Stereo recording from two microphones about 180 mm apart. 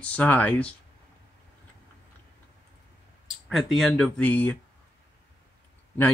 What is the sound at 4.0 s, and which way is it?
Speech, 10° left (ahead or behind).